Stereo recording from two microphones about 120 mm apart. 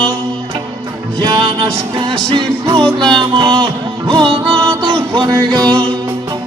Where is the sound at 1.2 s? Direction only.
35° right (ahead or behind).